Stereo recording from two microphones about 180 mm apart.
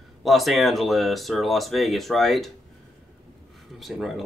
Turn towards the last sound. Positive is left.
turn(degrees=0)  # may be behind; listen again after turning